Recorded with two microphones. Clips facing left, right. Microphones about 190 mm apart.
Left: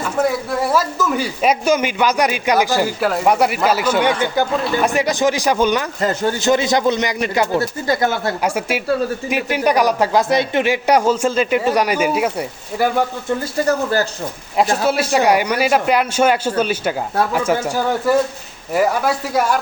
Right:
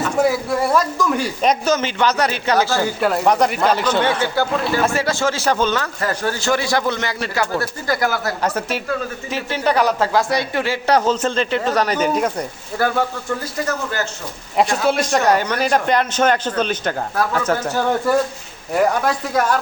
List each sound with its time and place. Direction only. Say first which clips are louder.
0.2 s speech: even; centre (ahead or behind)
3.0 s speech: right 1 dB; centre (ahead or behind); by 8.4 s 25° left (ahead or behind)
8.4 s speech: left 2 dB; 10° left (ahead or behind)
13.7 s speech: left 8 dB; 35° left (ahead or behind)
14.5 s speech: even; centre (ahead or behind)